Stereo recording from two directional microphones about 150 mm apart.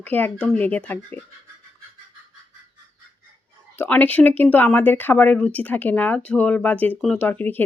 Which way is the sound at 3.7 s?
10° left (ahead or behind).